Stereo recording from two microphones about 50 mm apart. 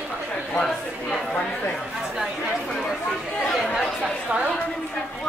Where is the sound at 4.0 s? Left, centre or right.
Right.